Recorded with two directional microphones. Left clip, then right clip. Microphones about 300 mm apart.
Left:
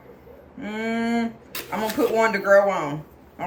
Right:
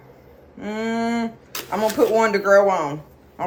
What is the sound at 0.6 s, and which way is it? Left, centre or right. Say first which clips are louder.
Speech: right 2 dB; centre.